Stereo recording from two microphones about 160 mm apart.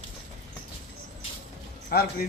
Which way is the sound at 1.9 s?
70° left (ahead or behind).